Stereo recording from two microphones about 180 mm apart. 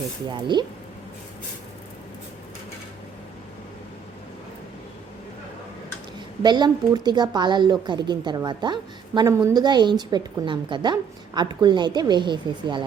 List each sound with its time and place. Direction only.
0.3 s a woman's voice: 25° right (ahead or behind)
6.4 s a woman's voice: 25° right (ahead or behind)